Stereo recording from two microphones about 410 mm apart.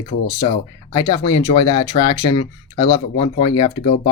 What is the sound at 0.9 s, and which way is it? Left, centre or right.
Speech, centre.